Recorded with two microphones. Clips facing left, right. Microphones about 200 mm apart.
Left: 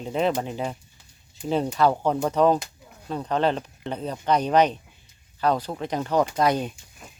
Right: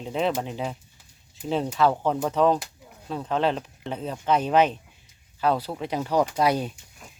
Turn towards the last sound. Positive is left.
turn(degrees=-10)  # may be behind; listen again after turning